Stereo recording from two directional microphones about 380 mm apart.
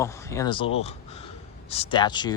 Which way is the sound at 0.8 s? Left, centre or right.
Centre.